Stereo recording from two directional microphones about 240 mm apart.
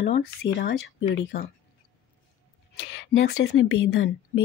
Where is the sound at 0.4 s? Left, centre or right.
Left.